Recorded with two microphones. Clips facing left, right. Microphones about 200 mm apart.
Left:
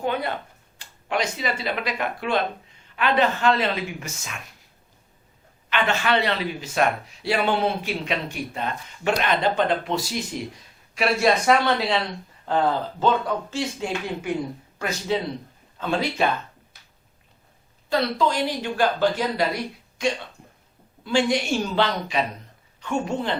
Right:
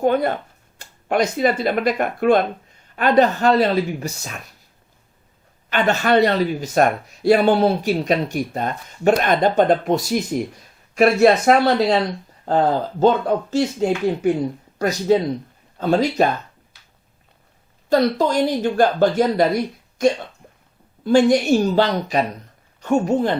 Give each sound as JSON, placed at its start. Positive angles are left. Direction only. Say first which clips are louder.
{"t": 0.0, "sound": "speech", "louder": "right 8 dB", "side_deg": -45}
{"t": 5.6, "sound": "speech", "louder": "right 5 dB", "side_deg": -40}
{"t": 17.8, "sound": "speech", "louder": "right 6 dB", "side_deg": -45}
{"t": 21.0, "sound": "speech", "louder": "right 8 dB", "side_deg": -40}